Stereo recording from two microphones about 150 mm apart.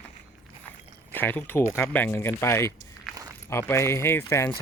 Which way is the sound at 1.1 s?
15° left (ahead or behind).